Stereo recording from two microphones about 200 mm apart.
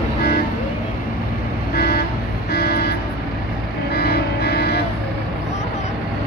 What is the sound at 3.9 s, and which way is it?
Music, 55° left (ahead or behind).